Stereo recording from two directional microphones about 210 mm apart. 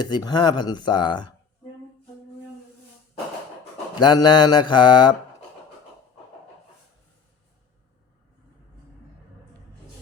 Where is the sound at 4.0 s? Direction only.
20° left (ahead or behind).